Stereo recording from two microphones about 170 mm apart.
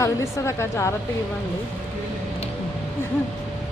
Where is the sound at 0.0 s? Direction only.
15° left (ahead or behind).